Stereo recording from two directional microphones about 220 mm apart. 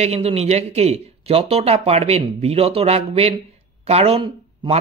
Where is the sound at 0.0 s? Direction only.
30° right (ahead or behind).